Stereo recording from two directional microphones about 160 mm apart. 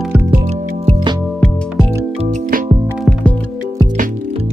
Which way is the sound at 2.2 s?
50° right (ahead or behind).